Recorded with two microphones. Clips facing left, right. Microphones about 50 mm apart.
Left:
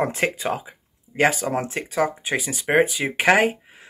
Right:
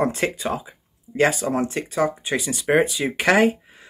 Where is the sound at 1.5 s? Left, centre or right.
Left.